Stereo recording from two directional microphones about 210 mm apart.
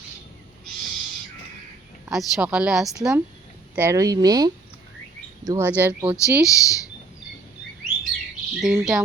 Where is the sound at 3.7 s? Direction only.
15° right (ahead or behind).